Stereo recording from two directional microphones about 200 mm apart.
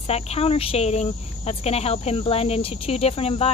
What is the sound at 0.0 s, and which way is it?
Speech, 30° left (ahead or behind).